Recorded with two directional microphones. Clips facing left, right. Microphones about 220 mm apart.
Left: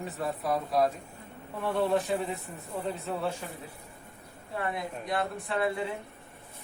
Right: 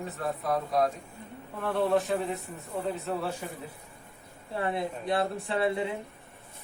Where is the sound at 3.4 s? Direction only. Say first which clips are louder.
Right 2 dB; 10° right (ahead or behind).